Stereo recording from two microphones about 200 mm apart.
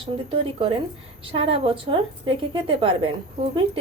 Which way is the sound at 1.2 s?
30° right (ahead or behind).